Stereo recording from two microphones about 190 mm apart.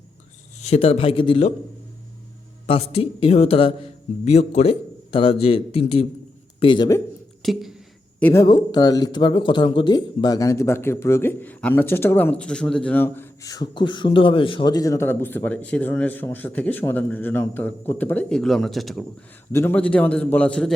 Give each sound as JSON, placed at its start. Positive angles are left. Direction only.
{"t": 0.6, "sound": "speech", "side_deg": 30}
{"t": 2.6, "sound": "a man's voice", "side_deg": 30}
{"t": 7.4, "sound": "a sound", "side_deg": 0}
{"t": 8.2, "sound": "speech", "side_deg": 15}
{"t": 19.5, "sound": "speech", "side_deg": 10}